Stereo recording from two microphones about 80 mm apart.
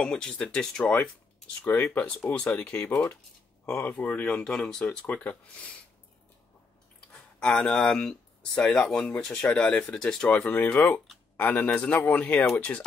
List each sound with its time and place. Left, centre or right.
0.0 s speech: centre
1.6 s a man's voice: left
5.0 s a man's voice: left
7.1 s a man's voice: centre